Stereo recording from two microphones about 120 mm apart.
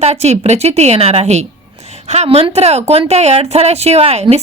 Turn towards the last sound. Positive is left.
turn(degrees=-60)  # may be behind; listen again after turning